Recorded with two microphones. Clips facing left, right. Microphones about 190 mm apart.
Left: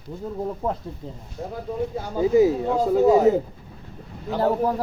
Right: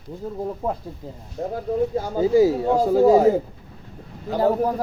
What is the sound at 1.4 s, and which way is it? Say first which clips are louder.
Speech: right 5 dB; 35° right (ahead or behind).